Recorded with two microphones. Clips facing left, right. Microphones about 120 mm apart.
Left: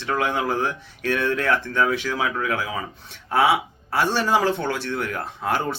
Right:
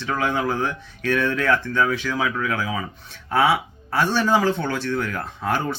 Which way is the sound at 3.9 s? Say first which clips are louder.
Right 1 dB; 25° left (ahead or behind).